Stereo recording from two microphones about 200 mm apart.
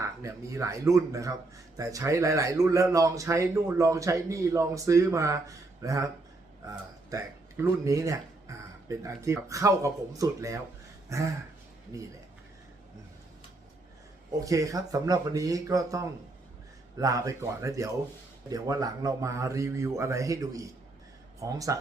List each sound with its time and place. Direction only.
0.0 s speech: 15° right (ahead or behind)
14.4 s speech: 15° right (ahead or behind)